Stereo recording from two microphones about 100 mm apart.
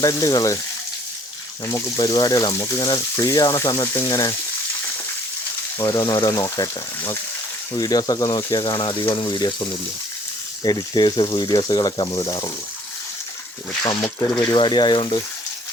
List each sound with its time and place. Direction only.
0.0 s speech: 35° left (ahead or behind)
1.6 s speech: 30° left (ahead or behind)
5.8 s speech: 35° left (ahead or behind)
10.6 s speech: 40° left (ahead or behind)
13.8 s speech: 40° left (ahead or behind)
14.5 s speech: 50° left (ahead or behind)